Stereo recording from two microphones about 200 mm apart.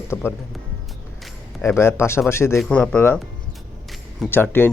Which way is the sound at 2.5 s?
5° left (ahead or behind).